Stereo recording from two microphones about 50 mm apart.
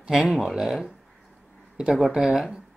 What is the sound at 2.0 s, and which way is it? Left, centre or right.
Speech, centre.